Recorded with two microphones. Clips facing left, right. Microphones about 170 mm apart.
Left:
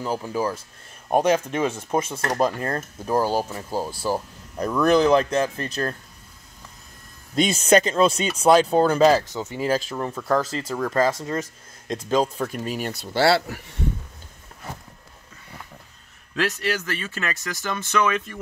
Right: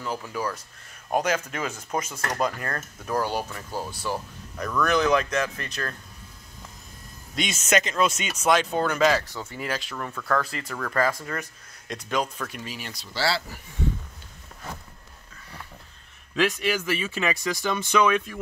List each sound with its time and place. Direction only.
0.0 s speech: 30° left (ahead or behind)
7.3 s speech: 35° left (ahead or behind)
9.3 s speech: 20° left (ahead or behind)
9.6 s speech: 35° left (ahead or behind)
12.5 s speech: 45° left (ahead or behind); by 13.7 s 65° left (ahead or behind)
16.3 s a man's voice: centre (ahead or behind)
16.8 s speech: 10° right (ahead or behind)